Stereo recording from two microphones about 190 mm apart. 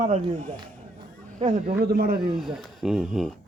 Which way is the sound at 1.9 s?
50° right (ahead or behind).